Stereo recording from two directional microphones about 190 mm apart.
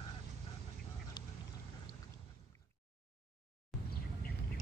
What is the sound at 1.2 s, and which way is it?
Duck, 20° left (ahead or behind).